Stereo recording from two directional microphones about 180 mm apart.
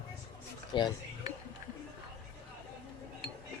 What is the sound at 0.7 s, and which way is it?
Speech, 25° left (ahead or behind).